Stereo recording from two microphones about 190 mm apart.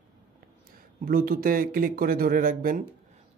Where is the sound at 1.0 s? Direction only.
50° right (ahead or behind).